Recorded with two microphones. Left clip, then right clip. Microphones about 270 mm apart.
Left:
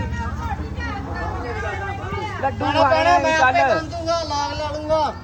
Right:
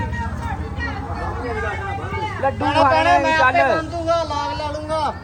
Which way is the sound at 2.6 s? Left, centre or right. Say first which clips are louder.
Right 1 dB; left.